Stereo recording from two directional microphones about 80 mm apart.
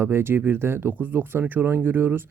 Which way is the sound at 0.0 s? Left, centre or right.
Right.